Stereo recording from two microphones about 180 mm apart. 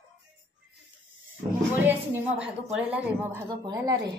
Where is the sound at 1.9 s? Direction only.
10° right (ahead or behind).